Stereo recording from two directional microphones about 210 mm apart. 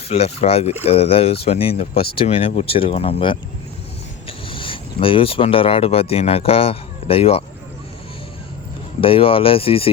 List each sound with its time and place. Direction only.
0.1 s speech: 30° left (ahead or behind)
9.0 s speech: 25° left (ahead or behind)